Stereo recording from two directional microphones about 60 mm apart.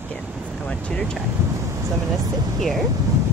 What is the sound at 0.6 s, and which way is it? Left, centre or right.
Speech, left.